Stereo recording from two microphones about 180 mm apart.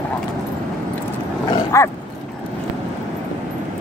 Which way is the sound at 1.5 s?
15° left (ahead or behind).